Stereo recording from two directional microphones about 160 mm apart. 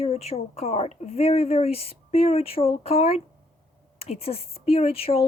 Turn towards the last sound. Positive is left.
turn(degrees=35)  # may be behind; listen again after turning